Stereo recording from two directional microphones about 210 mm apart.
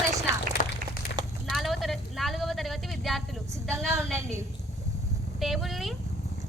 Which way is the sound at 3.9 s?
15° right (ahead or behind).